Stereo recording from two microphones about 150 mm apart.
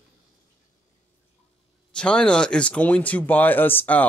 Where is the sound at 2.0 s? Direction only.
5° left (ahead or behind).